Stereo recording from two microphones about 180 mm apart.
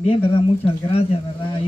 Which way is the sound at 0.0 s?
30° left (ahead or behind).